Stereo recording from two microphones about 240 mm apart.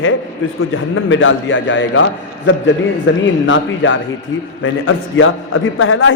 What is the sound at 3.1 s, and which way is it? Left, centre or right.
A man's voice, left.